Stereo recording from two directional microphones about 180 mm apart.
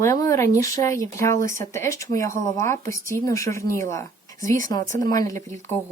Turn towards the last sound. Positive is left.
turn(degrees=15)  # may be behind; listen again after turning